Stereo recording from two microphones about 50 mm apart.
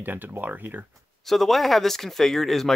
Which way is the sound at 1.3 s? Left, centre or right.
Centre.